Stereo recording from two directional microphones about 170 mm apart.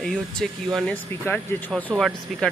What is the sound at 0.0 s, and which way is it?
Speech, 5° left (ahead or behind).